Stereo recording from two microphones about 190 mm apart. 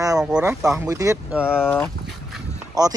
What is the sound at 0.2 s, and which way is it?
Speech, 5° right (ahead or behind).